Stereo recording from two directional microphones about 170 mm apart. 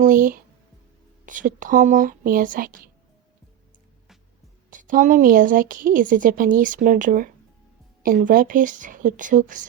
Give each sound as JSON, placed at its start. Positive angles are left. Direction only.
{"t": 0.0, "sound": "a woman's voice", "side_deg": -55}
{"t": 4.7, "sound": "a woman's voice", "side_deg": -50}